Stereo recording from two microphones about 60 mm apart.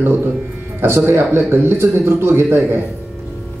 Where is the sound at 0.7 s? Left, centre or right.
Right.